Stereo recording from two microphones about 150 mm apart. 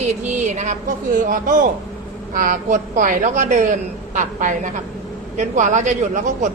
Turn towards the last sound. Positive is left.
turn(degrees=-55)  # may be behind; listen again after turning